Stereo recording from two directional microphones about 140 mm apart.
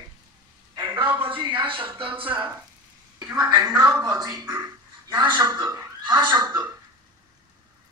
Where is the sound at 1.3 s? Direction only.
35° right (ahead or behind).